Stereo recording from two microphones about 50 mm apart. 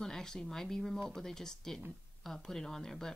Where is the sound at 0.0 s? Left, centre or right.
Centre.